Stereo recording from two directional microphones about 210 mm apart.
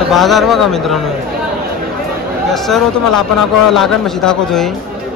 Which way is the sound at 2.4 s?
Centre (ahead or behind).